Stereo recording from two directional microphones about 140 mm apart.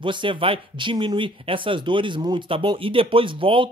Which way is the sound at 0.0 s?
35° right (ahead or behind).